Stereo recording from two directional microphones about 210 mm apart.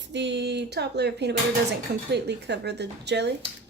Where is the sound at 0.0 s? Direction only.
55° right (ahead or behind).